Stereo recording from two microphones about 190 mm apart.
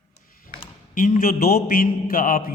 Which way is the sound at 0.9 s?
45° left (ahead or behind).